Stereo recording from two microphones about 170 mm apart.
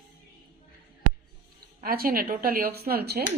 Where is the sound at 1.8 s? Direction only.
60° right (ahead or behind).